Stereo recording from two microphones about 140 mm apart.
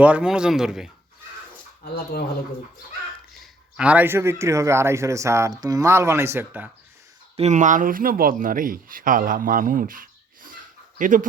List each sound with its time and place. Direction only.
0.0 s speech: 10° right (ahead or behind)
3.3 s a man's voice: 5° right (ahead or behind)
7.3 s speech: 55° right (ahead or behind)